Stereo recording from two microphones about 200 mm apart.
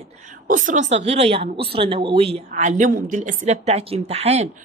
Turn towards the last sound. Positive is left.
turn(degrees=-30)  # may be behind; listen again after turning